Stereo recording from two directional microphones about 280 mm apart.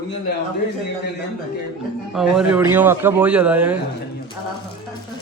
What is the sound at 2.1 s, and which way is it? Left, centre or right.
Speech, centre.